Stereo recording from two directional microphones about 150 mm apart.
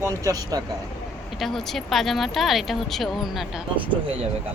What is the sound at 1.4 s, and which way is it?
A woman's voice, centre (ahead or behind).